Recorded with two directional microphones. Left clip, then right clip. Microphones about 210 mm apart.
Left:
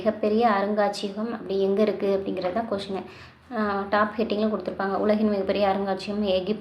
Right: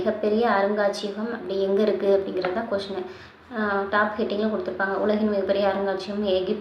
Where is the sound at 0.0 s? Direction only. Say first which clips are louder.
Even; 30° left (ahead or behind).